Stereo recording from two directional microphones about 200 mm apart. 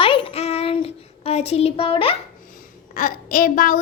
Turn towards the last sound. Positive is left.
turn(degrees=40)  # may be behind; listen again after turning